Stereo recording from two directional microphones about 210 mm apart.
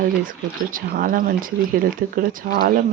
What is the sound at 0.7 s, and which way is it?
Speech, 40° right (ahead or behind).